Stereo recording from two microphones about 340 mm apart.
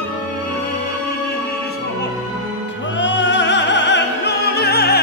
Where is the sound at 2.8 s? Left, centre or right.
Left.